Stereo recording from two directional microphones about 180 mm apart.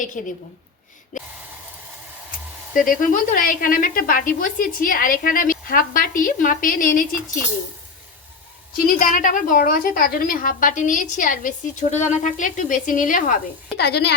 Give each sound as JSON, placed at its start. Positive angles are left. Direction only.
{"t": 0.0, "sound": "a woman's voice", "side_deg": 45}
{"t": 2.7, "sound": "a woman's voice", "side_deg": 50}
{"t": 8.7, "sound": "a woman's voice", "side_deg": 50}
{"t": 13.7, "sound": "a woman's voice", "side_deg": 65}